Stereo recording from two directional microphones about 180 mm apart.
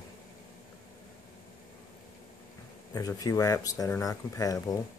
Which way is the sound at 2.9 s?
20° left (ahead or behind).